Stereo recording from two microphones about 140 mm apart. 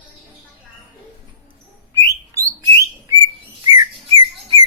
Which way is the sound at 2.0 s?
25° right (ahead or behind).